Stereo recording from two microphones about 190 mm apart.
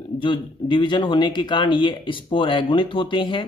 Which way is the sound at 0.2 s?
25° left (ahead or behind).